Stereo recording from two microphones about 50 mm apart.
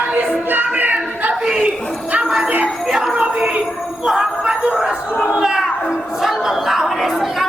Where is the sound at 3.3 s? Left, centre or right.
Right.